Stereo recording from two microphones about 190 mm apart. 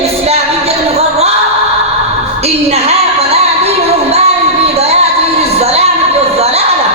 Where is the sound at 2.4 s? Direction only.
35° right (ahead or behind).